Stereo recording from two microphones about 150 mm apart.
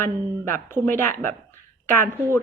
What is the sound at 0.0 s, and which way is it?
A woman's voice, 15° left (ahead or behind).